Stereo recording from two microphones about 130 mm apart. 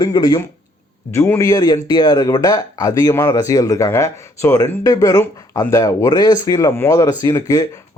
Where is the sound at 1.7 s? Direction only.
35° left (ahead or behind).